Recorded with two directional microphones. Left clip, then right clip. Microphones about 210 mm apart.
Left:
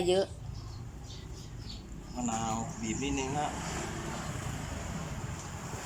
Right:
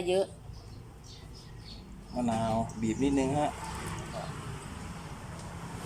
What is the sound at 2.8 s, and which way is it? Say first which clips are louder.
Speech: right 5 dB; 25° right (ahead or behind).